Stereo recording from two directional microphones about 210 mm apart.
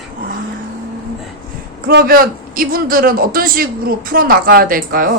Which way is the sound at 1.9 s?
50° right (ahead or behind).